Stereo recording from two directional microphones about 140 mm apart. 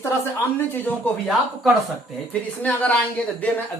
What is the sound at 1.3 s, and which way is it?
Speech, centre (ahead or behind).